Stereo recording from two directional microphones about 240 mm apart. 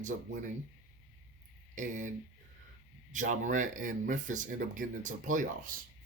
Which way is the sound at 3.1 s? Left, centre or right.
Right.